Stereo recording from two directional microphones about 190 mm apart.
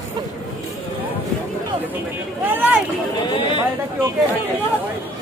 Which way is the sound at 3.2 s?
25° left (ahead or behind).